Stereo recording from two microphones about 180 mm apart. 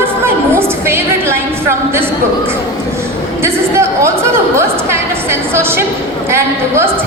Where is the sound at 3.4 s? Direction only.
15° right (ahead or behind).